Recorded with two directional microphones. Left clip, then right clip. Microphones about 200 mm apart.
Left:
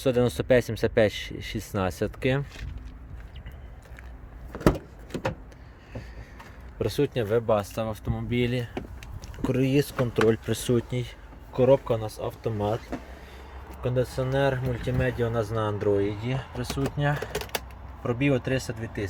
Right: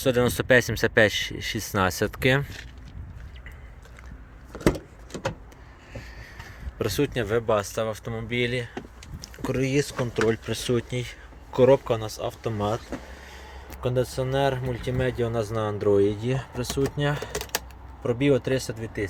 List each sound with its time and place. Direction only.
0.0 s speech: centre (ahead or behind)
4.6 s power windows: 5° left (ahead or behind)
6.7 s speech: centre (ahead or behind); by 10.8 s 15° left (ahead or behind)
10.8 s speech: centre (ahead or behind)
11.5 s speech: 15° right (ahead or behind)
11.9 s speech: centre (ahead or behind)
13.8 s speech: 15° right (ahead or behind)
16.0 s speech: 35° right (ahead or behind)
18.0 s speech: 15° right (ahead or behind)